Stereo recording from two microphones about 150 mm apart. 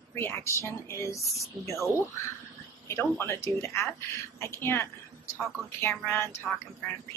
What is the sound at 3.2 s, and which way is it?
A woman's voice, 15° left (ahead or behind).